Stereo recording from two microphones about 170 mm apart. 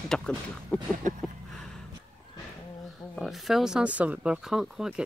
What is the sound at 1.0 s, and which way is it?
Speech, 45° right (ahead or behind).